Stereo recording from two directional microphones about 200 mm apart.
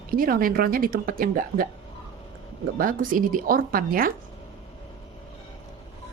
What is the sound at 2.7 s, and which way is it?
Speech, 45° right (ahead or behind).